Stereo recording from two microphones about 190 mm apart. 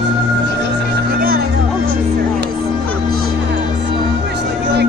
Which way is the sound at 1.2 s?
50° right (ahead or behind).